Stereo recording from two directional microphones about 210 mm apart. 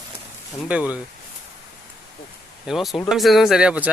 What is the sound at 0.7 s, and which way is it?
Speech, 5° right (ahead or behind).